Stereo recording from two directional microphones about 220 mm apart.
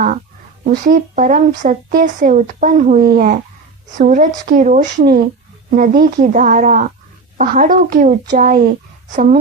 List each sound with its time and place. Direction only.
0.6 s speech: 40° right (ahead or behind)